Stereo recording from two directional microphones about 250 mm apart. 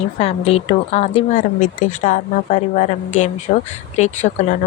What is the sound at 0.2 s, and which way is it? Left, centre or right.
Speech, left.